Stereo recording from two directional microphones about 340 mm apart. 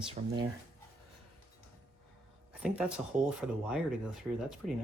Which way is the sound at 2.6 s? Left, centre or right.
Centre.